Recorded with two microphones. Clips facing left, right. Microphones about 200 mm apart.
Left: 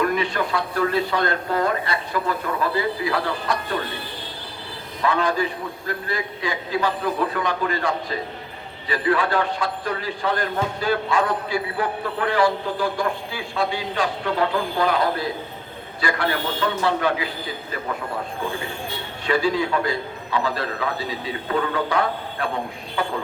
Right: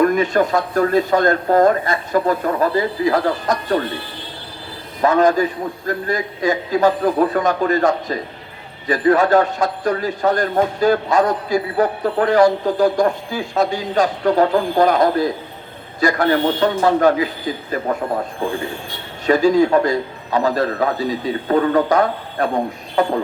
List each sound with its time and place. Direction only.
0.0 s a man's voice: 45° right (ahead or behind)
5.0 s a man's voice: 45° right (ahead or behind)
19.2 s a man's voice: 45° right (ahead or behind)